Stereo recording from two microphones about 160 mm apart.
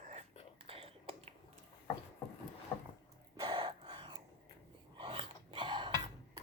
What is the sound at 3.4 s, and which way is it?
Gasp, 30° right (ahead or behind).